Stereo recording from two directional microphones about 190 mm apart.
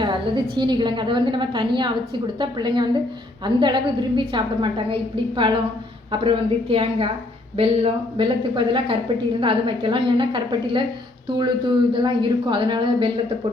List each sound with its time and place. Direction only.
0.0 s a woman's voice: 25° right (ahead or behind)